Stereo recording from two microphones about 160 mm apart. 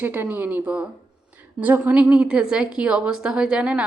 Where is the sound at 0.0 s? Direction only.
10° right (ahead or behind).